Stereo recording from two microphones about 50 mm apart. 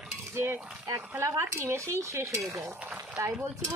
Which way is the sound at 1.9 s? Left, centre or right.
Right.